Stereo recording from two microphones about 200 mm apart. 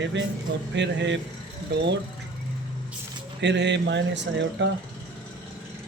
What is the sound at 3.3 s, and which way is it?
Speech, 60° right (ahead or behind).